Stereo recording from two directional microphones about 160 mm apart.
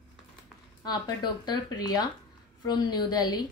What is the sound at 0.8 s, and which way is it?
A woman's voice, 25° left (ahead or behind).